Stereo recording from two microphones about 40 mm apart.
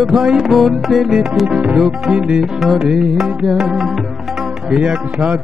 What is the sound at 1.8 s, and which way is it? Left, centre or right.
Music, centre.